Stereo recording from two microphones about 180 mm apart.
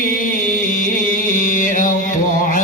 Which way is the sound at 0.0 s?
50° left (ahead or behind).